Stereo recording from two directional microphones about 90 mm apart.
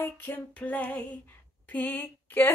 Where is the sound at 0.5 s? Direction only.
15° left (ahead or behind).